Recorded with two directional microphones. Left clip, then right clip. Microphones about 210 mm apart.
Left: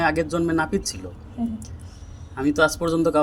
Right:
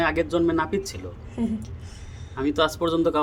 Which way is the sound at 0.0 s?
10° left (ahead or behind).